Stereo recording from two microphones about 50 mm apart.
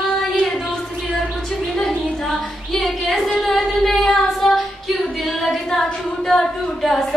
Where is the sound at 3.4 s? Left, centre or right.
Centre.